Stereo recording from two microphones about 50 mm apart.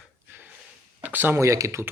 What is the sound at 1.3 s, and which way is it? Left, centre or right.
Speech, right.